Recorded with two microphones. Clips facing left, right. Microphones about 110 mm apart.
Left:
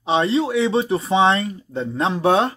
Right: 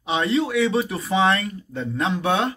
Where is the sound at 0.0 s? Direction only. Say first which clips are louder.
Left 3 dB; 30° left (ahead or behind).